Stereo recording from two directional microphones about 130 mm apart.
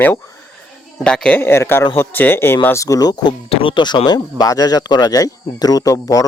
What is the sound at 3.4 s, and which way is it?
Speech, 45° left (ahead or behind).